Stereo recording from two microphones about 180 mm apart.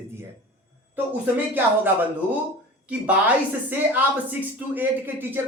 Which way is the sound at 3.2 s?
10° right (ahead or behind).